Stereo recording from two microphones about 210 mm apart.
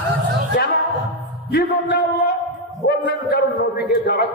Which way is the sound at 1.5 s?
50° left (ahead or behind).